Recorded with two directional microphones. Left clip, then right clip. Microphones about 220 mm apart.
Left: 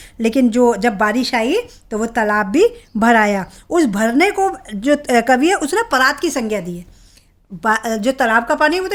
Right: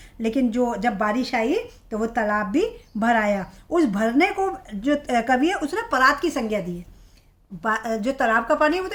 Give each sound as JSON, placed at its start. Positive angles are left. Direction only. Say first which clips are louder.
{"t": 0.0, "sound": "speech", "louder": "left 8 dB", "side_deg": 50}